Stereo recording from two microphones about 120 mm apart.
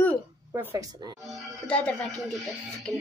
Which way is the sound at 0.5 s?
20° right (ahead or behind).